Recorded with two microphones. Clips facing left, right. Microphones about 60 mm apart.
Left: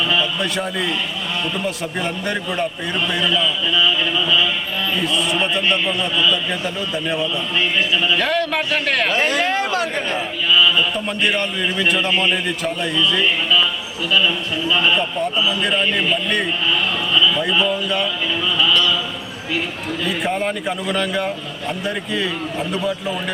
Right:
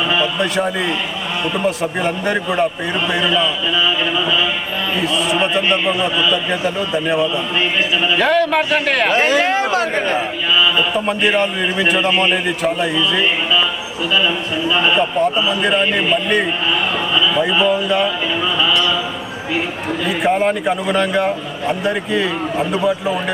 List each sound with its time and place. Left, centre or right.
0.3 s a man's voice: centre
3.8 s a man's voice: centre
4.9 s a man's voice: centre
7.5 s a man's voice: centre
10.2 s a sound: centre
10.9 s a man's voice: centre
17.2 s a sound: centre
17.4 s speech: centre
18.6 s a sound: centre
20.1 s a man's voice: centre